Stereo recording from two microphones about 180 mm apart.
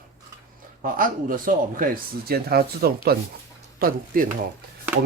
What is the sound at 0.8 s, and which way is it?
Speech, 50° right (ahead or behind).